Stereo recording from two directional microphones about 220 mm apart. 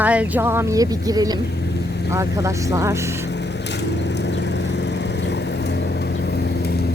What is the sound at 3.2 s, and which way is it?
Lawn mower, 50° left (ahead or behind).